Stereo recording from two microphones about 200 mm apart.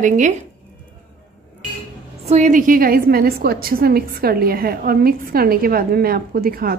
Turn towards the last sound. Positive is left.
turn(degrees=-50)  # may be behind; listen again after turning